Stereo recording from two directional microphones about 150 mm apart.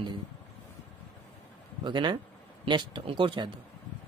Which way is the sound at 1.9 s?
30° right (ahead or behind).